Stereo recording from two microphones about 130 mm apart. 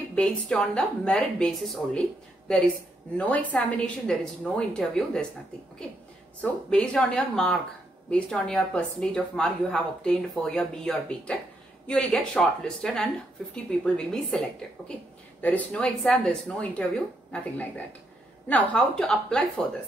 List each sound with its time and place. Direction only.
0.1 s speech: 5° left (ahead or behind)
6.4 s a woman's voice: 5° left (ahead or behind)
14.8 s speech: 20° left (ahead or behind)
15.4 s speech: 10° left (ahead or behind)